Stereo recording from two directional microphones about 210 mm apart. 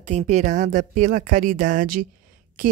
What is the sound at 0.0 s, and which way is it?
A woman's voice, 35° right (ahead or behind).